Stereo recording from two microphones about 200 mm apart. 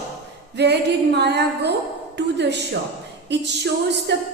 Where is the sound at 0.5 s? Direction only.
55° right (ahead or behind).